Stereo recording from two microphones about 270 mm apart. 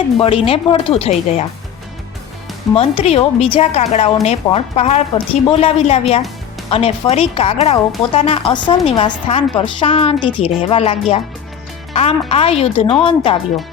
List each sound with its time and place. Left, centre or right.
0.2 s speech: left
2.7 s speech: left
12.3 s speech: left